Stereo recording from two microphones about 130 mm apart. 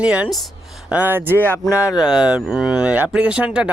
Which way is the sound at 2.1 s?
5° right (ahead or behind).